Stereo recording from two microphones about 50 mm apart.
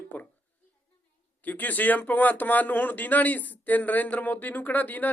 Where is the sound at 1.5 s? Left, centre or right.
Left.